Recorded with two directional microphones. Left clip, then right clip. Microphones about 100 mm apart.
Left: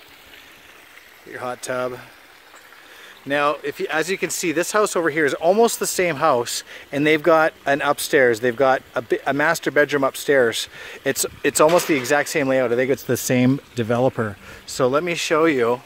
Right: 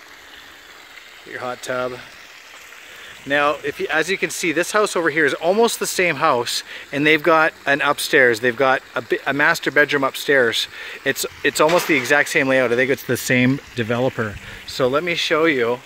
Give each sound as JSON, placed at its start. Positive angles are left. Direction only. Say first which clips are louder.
{"t": 1.3, "sound": "speech", "louder": "right 1 dB", "side_deg": 15}
{"t": 3.3, "sound": "speech", "louder": "right 2 dB", "side_deg": 5}
{"t": 11.9, "sound": "speech", "louder": "right 3 dB", "side_deg": 20}
{"t": 12.4, "sound": "speech", "louder": "right 2 dB", "side_deg": 5}
{"t": 12.9, "sound": "speech", "louder": "right 2 dB", "side_deg": 20}
{"t": 14.7, "sound": "speech", "louder": "right 1 dB", "side_deg": 35}